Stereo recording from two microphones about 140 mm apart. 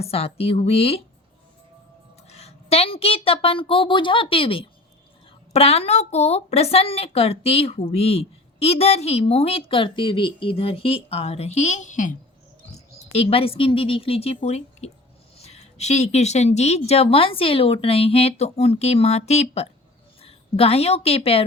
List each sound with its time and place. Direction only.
0.0 s a woman's voice: 45° left (ahead or behind)
2.3 s a woman's voice: 45° left (ahead or behind); by 12.1 s 65° left (ahead or behind)
13.1 s a woman's voice: 45° left (ahead or behind)